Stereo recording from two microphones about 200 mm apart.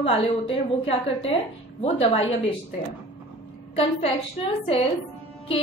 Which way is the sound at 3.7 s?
30° left (ahead or behind).